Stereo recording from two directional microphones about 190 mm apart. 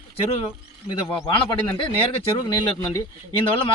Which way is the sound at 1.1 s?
25° left (ahead or behind).